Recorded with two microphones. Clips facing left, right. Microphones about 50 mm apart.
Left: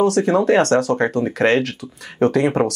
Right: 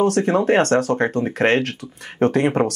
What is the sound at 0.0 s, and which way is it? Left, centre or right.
Speech, right.